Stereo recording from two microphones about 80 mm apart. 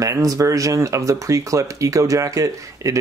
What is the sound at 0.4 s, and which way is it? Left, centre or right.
Speech, right.